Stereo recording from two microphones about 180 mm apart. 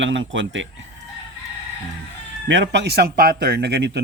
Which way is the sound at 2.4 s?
85° right.